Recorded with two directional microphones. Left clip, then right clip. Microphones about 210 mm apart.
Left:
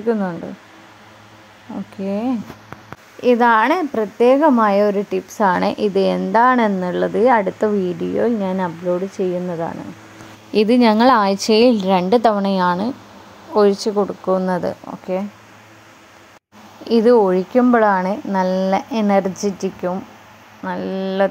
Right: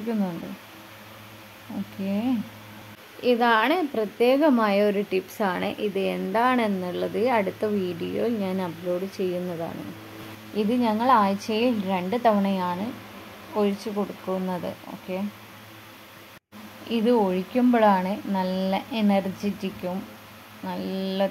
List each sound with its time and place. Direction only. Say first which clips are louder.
2.0 s a woman's voice: left 6 dB; 25° left (ahead or behind)
10.5 s a woman's voice: left 11 dB; 40° left (ahead or behind)
16.9 s a woman's voice: left 10 dB; 30° left (ahead or behind)